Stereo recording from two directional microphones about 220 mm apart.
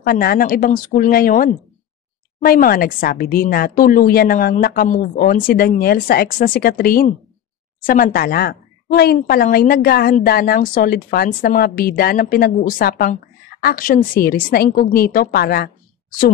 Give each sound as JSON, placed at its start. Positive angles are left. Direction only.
{"t": 0.0, "sound": "a woman's voice", "side_deg": 40}